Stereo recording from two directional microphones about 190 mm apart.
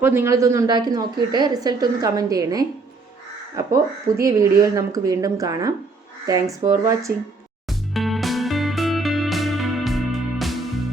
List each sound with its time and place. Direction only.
0.0 s a woman's voice: 10° right (ahead or behind)
7.7 s music: centre (ahead or behind)